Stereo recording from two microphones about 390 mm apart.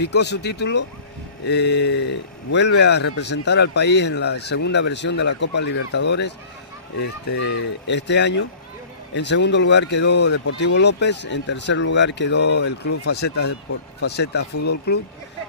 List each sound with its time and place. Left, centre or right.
0.0 s speech: left